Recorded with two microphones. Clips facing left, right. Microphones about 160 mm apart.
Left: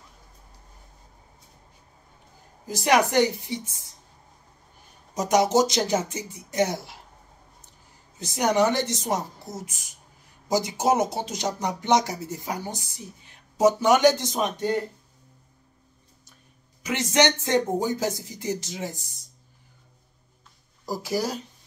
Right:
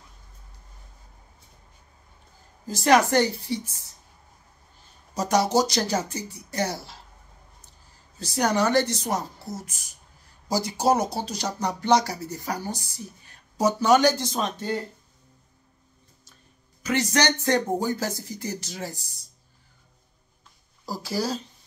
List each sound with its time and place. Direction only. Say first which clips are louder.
2.6 s a woman's voice: right 2 dB; 15° left (ahead or behind)
5.1 s speech: left 1 dB; 20° left (ahead or behind)
8.2 s speech: left 2 dB; 20° left (ahead or behind)
16.8 s speech: left 1 dB; 20° left (ahead or behind)
20.8 s a woman's voice: left 1 dB; 15° left (ahead or behind)